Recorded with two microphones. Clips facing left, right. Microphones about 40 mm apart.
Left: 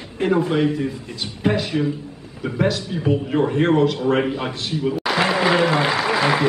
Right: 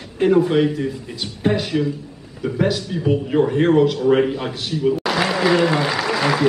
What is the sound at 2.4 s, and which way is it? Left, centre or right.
Speech, left.